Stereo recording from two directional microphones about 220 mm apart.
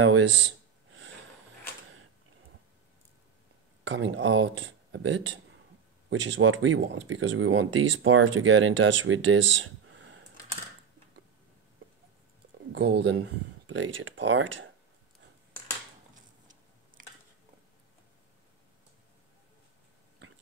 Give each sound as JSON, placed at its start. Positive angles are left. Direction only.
{"t": 0.0, "sound": "a sound", "side_deg": -60}
{"t": 3.8, "sound": "speech", "side_deg": -60}
{"t": 12.7, "sound": "speech", "side_deg": -55}